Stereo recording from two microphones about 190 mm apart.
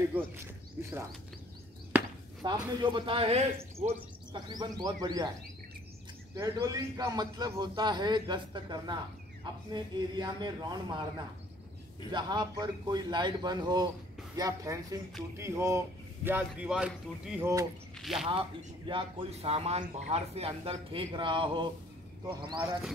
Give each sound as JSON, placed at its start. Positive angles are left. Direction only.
{"t": 0.1, "sound": "speech", "side_deg": -5}
{"t": 1.9, "sound": "chop", "side_deg": -10}
{"t": 2.4, "sound": "speech", "side_deg": -25}
{"t": 4.5, "sound": "speech", "side_deg": -20}
{"t": 6.3, "sound": "speech", "side_deg": -15}
{"t": 18.3, "sound": "speech", "side_deg": -30}
{"t": 22.6, "sound": "speech", "side_deg": -10}